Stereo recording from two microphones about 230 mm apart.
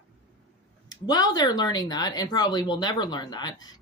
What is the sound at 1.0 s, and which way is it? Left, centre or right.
Speech, centre.